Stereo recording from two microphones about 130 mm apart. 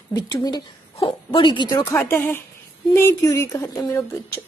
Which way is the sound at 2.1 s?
15° left (ahead or behind).